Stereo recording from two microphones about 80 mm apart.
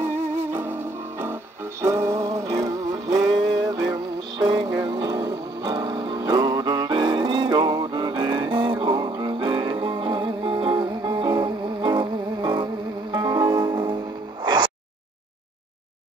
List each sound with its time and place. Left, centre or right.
0.0 s music: right
11.0 s music: right
14.4 s a sound: right